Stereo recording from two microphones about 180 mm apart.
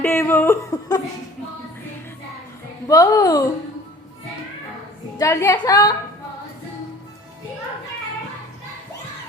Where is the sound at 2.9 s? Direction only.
20° left (ahead or behind).